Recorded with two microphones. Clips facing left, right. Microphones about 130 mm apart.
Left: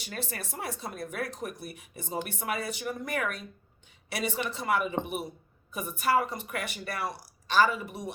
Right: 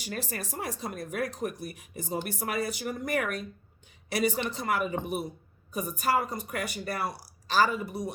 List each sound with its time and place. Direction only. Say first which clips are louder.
0.0 s speech: right 2 dB; 40° right (ahead or behind)